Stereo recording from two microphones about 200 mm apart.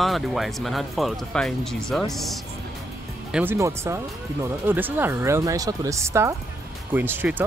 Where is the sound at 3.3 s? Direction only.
10° right (ahead or behind).